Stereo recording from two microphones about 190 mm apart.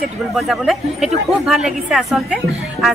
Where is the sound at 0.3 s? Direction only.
Centre (ahead or behind).